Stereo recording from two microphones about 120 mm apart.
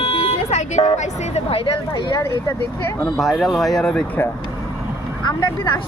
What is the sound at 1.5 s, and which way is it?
Speech, 50° left (ahead or behind).